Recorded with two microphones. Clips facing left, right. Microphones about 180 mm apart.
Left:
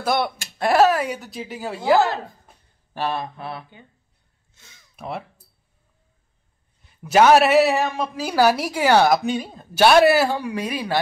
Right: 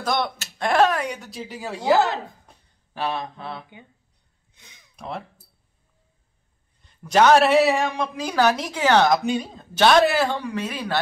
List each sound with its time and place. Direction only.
0.0 s speech: 10° left (ahead or behind)
2.4 s a sound: 5° left (ahead or behind)
4.6 s speech: 15° right (ahead or behind)
4.9 s speech: 5° left (ahead or behind)
6.8 s a woman's voice: 5° left (ahead or behind)